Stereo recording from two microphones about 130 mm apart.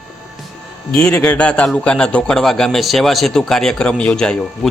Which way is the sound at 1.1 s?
10° left (ahead or behind).